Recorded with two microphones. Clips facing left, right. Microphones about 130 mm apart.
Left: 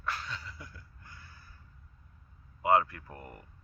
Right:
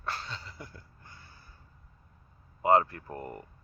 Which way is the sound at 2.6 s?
30° right (ahead or behind).